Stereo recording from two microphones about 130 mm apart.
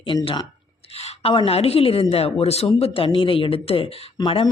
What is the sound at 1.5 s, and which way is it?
Speech, 50° left (ahead or behind).